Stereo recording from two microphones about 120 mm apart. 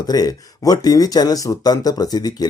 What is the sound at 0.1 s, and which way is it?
Speech, 30° left (ahead or behind).